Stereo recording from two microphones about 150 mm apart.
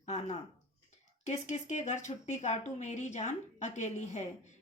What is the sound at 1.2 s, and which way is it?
Speech, 50° left (ahead or behind).